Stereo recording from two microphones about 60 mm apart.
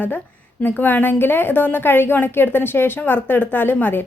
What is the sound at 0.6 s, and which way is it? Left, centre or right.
A woman's voice, left.